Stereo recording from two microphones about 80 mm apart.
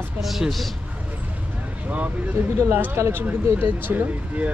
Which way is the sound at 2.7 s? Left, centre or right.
Right.